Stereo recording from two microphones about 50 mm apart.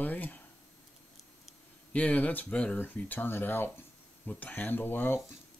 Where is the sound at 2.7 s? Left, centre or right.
Left.